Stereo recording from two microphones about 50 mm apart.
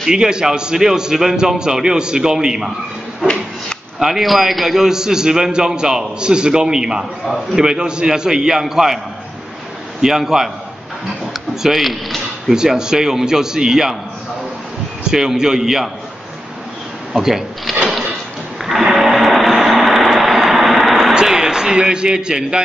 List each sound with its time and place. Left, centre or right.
0.0 s a man's voice: centre
4.0 s a man's voice: centre
10.0 s a man's voice: centre
11.6 s speech: centre
12.5 s a man's voice: centre
15.0 s a man's voice: centre
17.2 s a man's voice: centre
18.7 s a sound: centre
21.1 s a sound: centre